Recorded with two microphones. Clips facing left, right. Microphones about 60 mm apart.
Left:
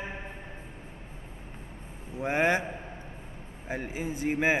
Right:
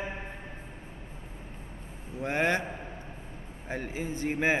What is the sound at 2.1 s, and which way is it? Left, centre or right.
Speech, centre.